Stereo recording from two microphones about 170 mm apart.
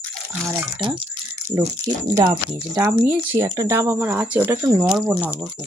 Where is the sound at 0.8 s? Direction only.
30° right (ahead or behind).